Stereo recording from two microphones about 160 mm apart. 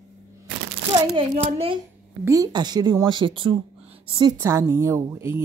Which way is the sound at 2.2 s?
20° right (ahead or behind).